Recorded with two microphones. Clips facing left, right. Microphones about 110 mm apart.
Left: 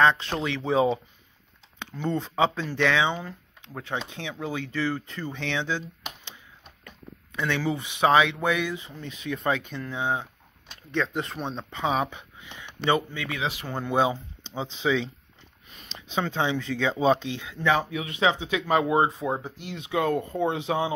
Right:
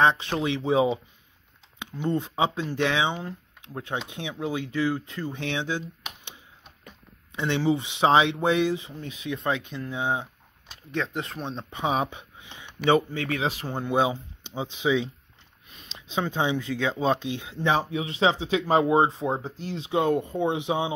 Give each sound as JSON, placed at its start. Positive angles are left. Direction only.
{"t": 0.0, "sound": "speech", "side_deg": -20}
{"t": 7.3, "sound": "speech", "side_deg": -25}
{"t": 9.4, "sound": "speech", "side_deg": 0}
{"t": 9.8, "sound": "speech", "side_deg": -15}
{"t": 10.9, "sound": "speech", "side_deg": 0}
{"t": 11.7, "sound": "speech", "side_deg": -25}
{"t": 13.1, "sound": "speech", "side_deg": -40}
{"t": 13.8, "sound": "speech", "side_deg": -10}
{"t": 16.2, "sound": "speech", "side_deg": -10}
{"t": 17.2, "sound": "speech", "side_deg": -20}